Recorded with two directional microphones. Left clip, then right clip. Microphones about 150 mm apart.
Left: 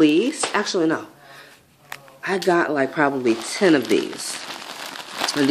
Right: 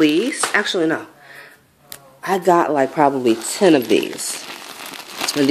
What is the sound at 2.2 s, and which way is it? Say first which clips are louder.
Speech: right 4 dB; 15° right (ahead or behind).